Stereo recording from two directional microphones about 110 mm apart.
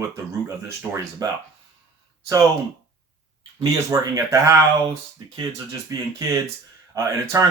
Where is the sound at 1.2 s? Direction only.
35° right (ahead or behind).